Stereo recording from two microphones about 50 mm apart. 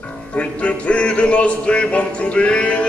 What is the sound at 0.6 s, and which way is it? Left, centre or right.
Music, left.